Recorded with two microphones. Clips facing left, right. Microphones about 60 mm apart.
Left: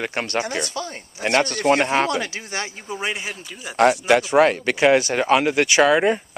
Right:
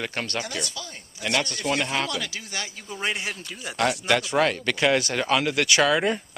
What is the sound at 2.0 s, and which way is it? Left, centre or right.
Speech, left.